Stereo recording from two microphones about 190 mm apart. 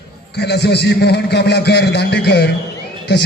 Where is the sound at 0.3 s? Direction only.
60° left (ahead or behind).